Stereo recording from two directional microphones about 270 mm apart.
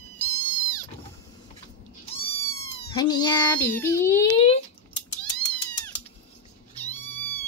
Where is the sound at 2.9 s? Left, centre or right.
Centre.